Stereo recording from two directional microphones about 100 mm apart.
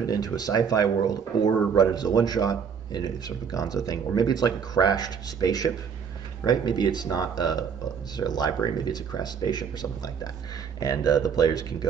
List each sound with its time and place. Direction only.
0.0 s speech: 40° left (ahead or behind)